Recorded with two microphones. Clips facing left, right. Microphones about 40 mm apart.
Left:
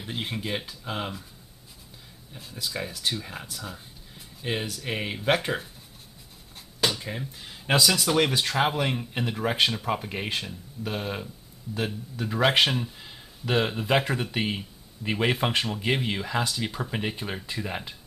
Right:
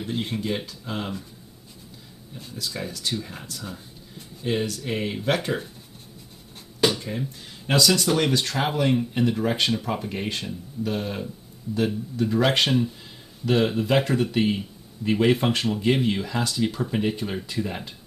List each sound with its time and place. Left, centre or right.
0.0 s speech: centre
2.3 s speech: centre
7.0 s speech: centre
7.8 s speech: centre